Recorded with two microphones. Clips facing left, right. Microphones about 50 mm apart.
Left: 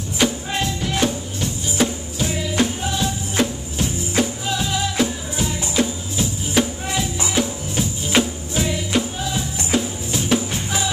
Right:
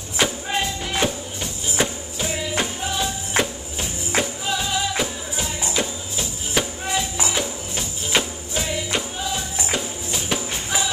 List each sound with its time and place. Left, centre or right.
0.2 s music: centre
4.2 s music: centre